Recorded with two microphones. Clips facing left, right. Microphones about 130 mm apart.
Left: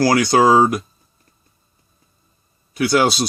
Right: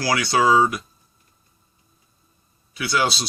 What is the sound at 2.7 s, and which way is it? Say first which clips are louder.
Speech: left 7 dB; 45° left (ahead or behind).